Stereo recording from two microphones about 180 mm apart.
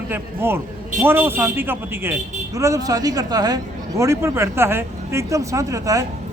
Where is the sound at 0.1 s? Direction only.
10° right (ahead or behind).